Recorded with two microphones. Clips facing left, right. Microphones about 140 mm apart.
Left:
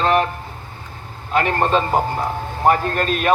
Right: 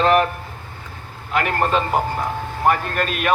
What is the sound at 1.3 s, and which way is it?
A man's voice, 30° left (ahead or behind).